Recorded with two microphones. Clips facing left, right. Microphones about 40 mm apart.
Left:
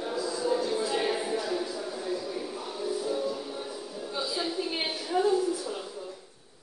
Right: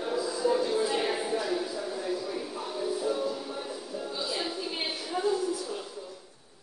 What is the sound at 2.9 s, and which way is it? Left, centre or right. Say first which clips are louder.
Music: left 1 dB; centre.